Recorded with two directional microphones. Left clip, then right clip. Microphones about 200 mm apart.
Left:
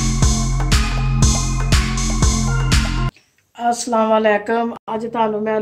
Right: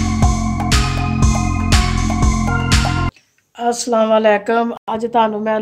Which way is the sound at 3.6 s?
40° right (ahead or behind).